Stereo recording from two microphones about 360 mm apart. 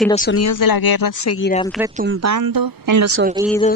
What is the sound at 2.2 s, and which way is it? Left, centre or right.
Speech, right.